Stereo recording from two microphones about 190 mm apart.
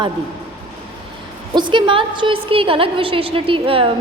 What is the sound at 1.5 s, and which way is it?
A woman's voice, 25° right (ahead or behind).